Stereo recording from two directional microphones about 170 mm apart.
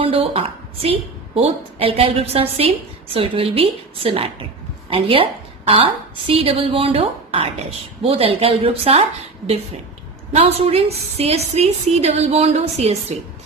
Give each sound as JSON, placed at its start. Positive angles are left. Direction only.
{"t": 0.0, "sound": "a woman's voice", "side_deg": -35}
{"t": 10.3, "sound": "a woman's voice", "side_deg": -35}